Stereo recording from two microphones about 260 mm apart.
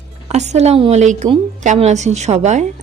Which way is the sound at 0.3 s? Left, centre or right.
Right.